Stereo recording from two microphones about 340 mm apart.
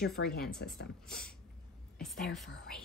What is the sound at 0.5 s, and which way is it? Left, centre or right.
Speech, left.